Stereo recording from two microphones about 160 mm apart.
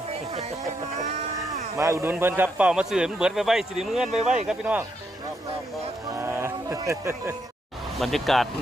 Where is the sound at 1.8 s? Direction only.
20° right (ahead or behind).